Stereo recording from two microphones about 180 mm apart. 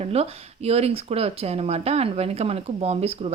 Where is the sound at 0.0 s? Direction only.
35° right (ahead or behind).